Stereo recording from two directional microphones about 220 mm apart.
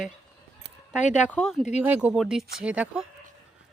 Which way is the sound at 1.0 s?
30° left (ahead or behind).